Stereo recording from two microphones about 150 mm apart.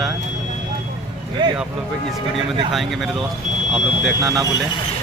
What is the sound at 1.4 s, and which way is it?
Speech, 30° right (ahead or behind).